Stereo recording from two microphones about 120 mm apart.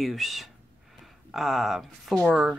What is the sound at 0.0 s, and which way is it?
Speech, centre (ahead or behind).